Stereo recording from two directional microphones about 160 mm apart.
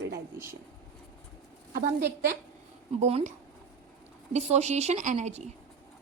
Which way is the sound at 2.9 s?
45° right (ahead or behind).